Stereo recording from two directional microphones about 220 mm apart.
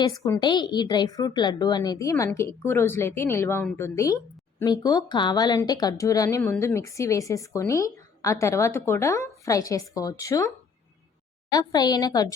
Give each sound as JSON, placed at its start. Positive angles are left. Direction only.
{"t": 0.0, "sound": "a woman's voice", "side_deg": 15}